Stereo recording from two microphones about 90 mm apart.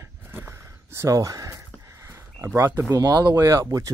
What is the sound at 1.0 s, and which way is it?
Speech, 40° right (ahead or behind).